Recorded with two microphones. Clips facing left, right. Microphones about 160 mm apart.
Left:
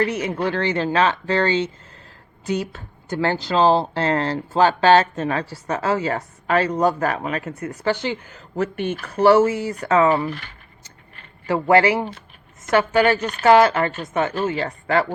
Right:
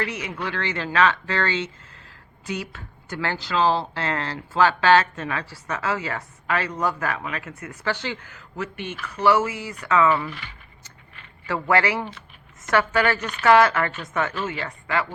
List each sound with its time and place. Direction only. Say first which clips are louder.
0.0 s speech: left 7 dB; 40° left (ahead or behind)
8.6 s speech: left 8 dB; 45° left (ahead or behind)
11.6 s speech: left 6 dB; 30° left (ahead or behind)